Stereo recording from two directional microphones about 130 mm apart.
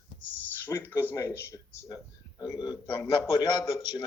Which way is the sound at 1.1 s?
20° left (ahead or behind).